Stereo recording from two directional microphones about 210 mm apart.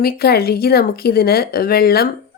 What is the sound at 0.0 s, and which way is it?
A woman's voice, 45° left (ahead or behind).